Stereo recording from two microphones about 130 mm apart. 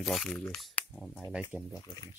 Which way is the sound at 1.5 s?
20° left (ahead or behind).